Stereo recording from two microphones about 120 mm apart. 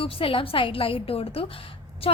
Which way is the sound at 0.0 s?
50° left (ahead or behind).